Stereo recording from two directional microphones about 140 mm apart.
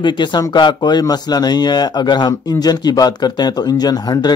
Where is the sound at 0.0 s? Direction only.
35° left (ahead or behind).